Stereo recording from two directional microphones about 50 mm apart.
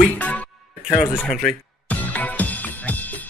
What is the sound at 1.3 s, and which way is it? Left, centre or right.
Speech, centre.